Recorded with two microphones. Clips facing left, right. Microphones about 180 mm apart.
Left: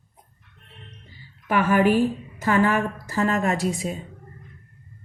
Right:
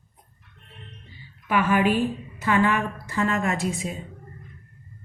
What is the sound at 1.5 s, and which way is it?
A woman's voice, 45° left (ahead or behind).